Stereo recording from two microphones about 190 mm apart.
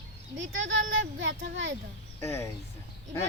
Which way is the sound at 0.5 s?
80° right.